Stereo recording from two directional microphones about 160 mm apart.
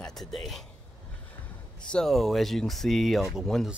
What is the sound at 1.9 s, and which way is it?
Speech, 5° left (ahead or behind).